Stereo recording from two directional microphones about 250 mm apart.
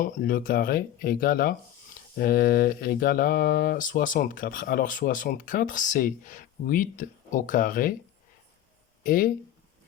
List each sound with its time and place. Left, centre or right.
0.0 s speech: left
9.0 s speech: left